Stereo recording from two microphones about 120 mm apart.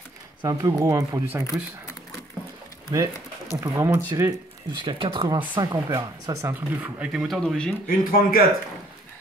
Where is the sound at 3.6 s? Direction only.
25° right (ahead or behind).